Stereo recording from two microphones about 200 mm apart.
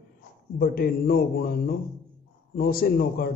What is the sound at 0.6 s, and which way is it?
Speech, 50° left (ahead or behind).